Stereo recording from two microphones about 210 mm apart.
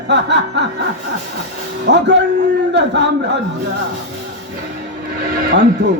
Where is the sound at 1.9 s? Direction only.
55° right (ahead or behind).